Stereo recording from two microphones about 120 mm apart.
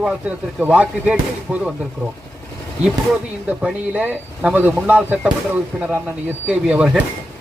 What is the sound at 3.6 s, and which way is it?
Speech, 10° right (ahead or behind).